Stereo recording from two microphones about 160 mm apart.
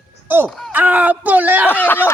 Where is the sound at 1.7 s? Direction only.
10° left (ahead or behind).